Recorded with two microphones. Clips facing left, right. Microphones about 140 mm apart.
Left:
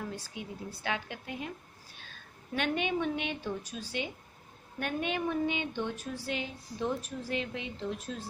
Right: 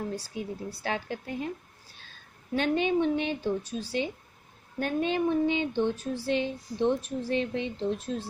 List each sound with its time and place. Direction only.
0.0 s speech: 35° right (ahead or behind)
2.5 s speech: 35° right (ahead or behind)